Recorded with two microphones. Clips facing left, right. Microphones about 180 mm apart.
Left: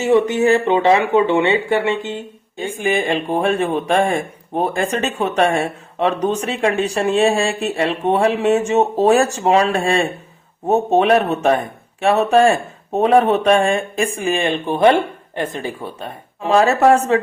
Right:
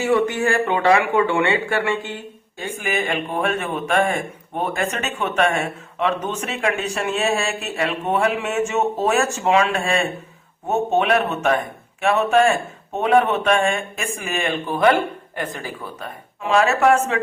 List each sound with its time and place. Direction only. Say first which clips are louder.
0.0 s speech: left 4 dB; 20° left (ahead or behind)